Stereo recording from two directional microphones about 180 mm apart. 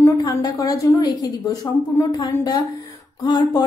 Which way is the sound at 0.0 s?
20° left (ahead or behind).